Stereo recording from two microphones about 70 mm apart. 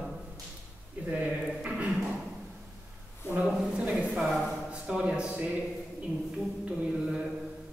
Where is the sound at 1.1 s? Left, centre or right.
Right.